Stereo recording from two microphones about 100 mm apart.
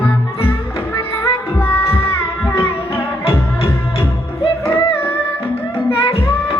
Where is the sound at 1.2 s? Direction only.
25° left (ahead or behind).